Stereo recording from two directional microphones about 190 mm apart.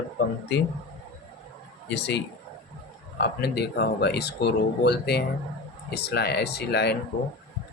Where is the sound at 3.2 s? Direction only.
60° left (ahead or behind).